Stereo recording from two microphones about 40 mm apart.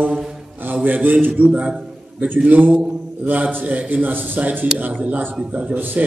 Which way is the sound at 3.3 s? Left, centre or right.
Right.